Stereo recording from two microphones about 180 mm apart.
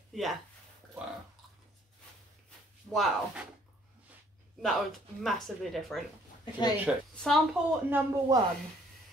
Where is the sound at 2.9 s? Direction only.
Centre (ahead or behind).